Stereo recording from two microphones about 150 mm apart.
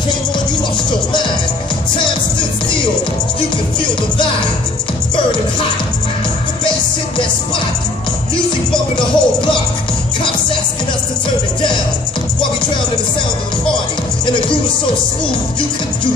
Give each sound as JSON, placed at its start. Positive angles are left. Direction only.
{"t": 8.9, "sound": "music", "side_deg": 35}